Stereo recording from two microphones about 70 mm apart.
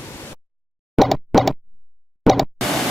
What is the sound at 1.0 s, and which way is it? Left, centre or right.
Plop, centre.